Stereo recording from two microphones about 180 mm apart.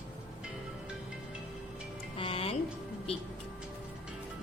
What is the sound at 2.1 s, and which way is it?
Music, 30° left (ahead or behind).